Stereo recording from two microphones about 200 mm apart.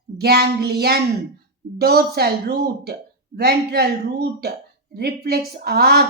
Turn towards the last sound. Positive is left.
turn(degrees=-50)  # may be behind; listen again after turning